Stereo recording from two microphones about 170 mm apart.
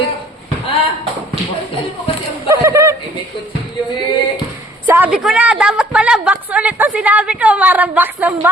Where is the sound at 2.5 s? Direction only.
20° right (ahead or behind).